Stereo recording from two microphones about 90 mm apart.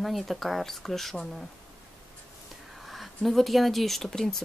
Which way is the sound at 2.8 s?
Centre (ahead or behind).